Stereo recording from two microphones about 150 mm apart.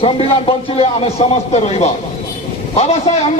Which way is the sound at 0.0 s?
40° left (ahead or behind).